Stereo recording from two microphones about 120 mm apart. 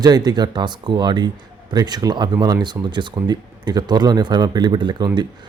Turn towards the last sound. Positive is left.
turn(degrees=-40)  # may be behind; listen again after turning